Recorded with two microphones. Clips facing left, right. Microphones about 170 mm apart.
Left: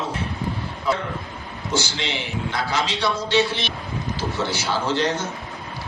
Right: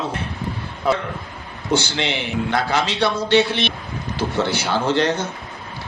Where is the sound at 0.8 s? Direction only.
60° right (ahead or behind).